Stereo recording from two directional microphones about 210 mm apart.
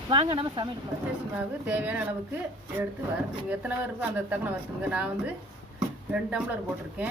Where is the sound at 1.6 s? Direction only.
5° right (ahead or behind).